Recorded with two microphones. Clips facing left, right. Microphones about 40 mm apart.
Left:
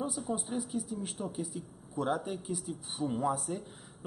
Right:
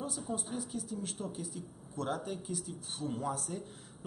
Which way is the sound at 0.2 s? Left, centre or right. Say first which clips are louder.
Left 3 dB; centre.